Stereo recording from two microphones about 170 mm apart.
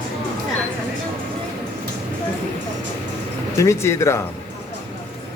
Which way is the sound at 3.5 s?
15° left (ahead or behind).